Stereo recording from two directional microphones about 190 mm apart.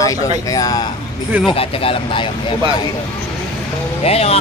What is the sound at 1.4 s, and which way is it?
Speech, 30° left (ahead or behind).